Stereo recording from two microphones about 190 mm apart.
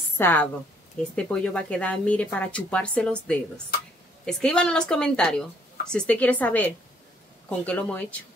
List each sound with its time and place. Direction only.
0.2 s a woman's voice: 10° left (ahead or behind)